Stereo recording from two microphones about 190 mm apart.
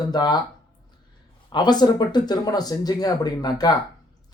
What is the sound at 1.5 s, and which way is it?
Speech, 20° left (ahead or behind).